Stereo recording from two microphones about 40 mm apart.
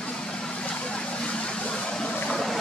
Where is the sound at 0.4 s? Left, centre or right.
Left.